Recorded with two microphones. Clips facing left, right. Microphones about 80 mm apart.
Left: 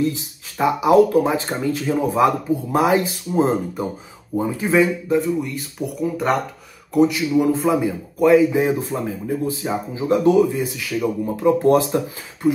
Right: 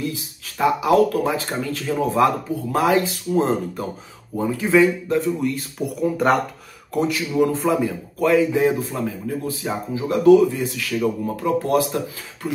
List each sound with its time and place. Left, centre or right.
0.6 s a man's voice: left
11.4 s speech: left